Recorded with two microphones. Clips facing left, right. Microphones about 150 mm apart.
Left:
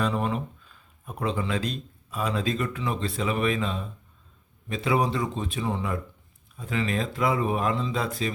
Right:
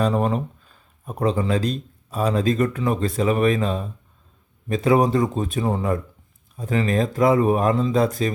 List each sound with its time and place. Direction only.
0.0 s speech: 40° right (ahead or behind)